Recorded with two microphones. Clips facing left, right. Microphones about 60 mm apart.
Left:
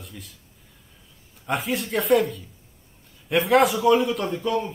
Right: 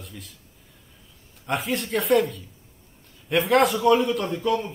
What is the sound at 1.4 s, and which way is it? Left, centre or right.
A man's voice, centre.